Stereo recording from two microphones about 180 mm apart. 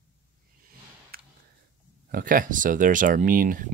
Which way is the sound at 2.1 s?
50° right (ahead or behind).